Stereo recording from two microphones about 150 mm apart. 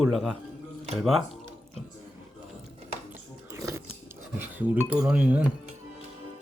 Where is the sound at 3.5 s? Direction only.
20° right (ahead or behind).